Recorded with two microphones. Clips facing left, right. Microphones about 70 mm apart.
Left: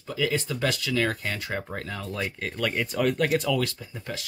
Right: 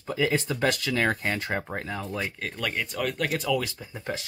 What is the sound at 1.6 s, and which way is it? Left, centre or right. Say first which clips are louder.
Speech: right 1 dB; centre.